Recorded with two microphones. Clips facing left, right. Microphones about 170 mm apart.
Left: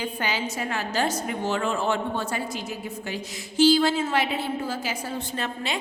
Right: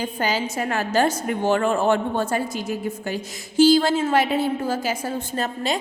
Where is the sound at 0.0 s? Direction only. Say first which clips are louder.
Right 4 dB; 40° right (ahead or behind).